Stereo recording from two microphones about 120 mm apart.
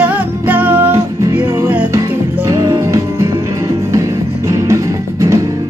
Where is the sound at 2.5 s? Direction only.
30° right (ahead or behind).